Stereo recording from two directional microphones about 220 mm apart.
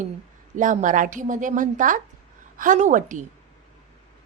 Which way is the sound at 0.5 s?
35° right (ahead or behind).